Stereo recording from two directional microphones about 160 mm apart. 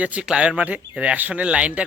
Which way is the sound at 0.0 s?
5° right (ahead or behind).